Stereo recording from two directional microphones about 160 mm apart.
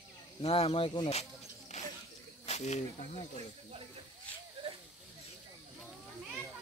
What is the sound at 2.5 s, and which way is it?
Speech, 45° left (ahead or behind).